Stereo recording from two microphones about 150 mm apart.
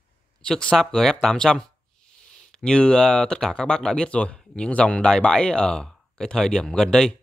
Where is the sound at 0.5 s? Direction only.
5° left (ahead or behind).